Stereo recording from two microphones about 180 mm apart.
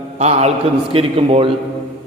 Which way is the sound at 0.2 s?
40° right (ahead or behind).